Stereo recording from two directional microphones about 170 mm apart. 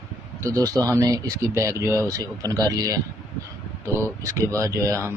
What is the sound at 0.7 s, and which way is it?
Speech, 10° left (ahead or behind).